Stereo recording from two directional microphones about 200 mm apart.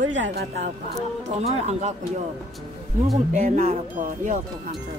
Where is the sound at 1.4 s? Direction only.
35° right (ahead or behind).